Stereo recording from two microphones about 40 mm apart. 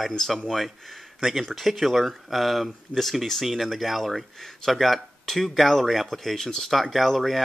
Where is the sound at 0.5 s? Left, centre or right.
Centre.